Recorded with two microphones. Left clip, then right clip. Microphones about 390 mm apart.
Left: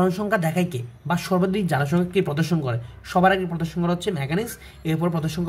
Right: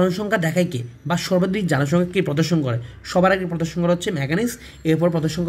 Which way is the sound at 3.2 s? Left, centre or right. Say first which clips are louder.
Right 1 dB; centre.